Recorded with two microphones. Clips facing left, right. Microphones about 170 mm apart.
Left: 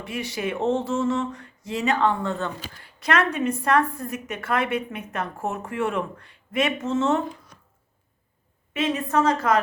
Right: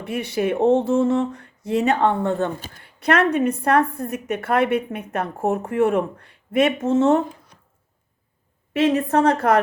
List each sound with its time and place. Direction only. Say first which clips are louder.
0.0 s a woman's voice: right 6 dB; 55° right (ahead or behind)
8.8 s a woman's voice: right 5 dB; 50° right (ahead or behind)